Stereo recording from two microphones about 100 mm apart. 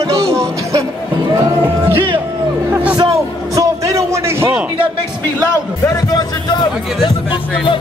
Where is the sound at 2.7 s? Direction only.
15° right (ahead or behind).